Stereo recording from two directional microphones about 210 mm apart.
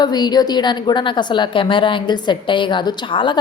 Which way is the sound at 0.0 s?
20° left (ahead or behind).